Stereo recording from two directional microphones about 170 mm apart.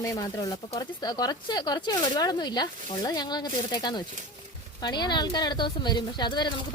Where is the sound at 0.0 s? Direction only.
20° left (ahead or behind).